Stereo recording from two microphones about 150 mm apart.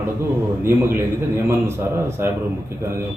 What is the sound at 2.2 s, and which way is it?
Speech, 15° right (ahead or behind).